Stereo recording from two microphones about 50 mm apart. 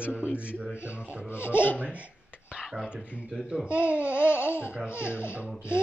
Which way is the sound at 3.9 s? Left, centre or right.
Left.